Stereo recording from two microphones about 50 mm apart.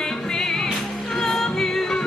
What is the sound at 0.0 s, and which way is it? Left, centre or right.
Music, centre.